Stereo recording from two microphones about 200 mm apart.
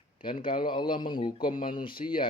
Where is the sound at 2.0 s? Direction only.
35° left (ahead or behind).